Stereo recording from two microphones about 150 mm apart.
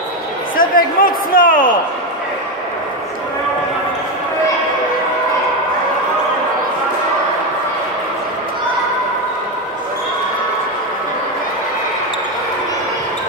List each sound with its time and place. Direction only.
0.6 s a man's voice: 70° left (ahead or behind)